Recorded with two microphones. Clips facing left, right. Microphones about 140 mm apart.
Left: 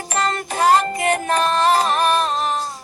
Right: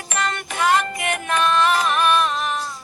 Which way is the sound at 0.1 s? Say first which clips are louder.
Left 3 dB; 35° left (ahead or behind).